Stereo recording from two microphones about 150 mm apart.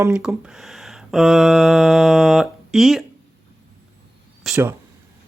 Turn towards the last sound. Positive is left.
turn(degrees=0)  # may be behind; listen again after turning